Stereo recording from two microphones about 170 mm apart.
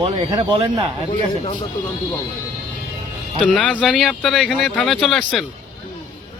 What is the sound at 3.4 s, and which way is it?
Speech, 5° left (ahead or behind).